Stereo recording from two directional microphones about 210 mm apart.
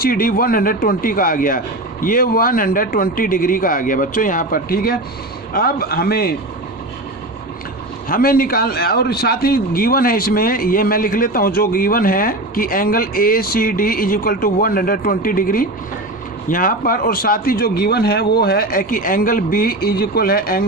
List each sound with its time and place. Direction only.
0.0 s a man's voice: 45° left (ahead or behind)
8.1 s a man's voice: 45° left (ahead or behind)